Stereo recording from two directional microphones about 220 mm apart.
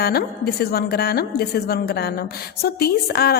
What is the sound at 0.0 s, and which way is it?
A woman's voice, 45° left (ahead or behind).